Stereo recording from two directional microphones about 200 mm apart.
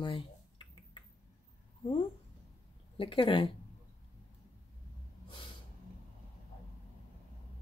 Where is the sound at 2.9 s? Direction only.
25° left (ahead or behind).